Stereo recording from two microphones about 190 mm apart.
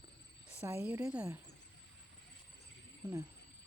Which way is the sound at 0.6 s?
10° right (ahead or behind).